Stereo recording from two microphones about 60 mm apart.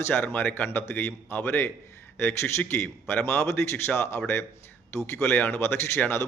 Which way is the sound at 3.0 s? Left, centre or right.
Left.